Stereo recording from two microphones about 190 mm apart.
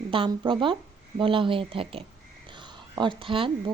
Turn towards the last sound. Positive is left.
turn(degrees=-30)  # may be behind; listen again after turning